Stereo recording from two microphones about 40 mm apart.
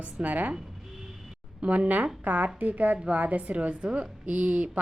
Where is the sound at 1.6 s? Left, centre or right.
Right.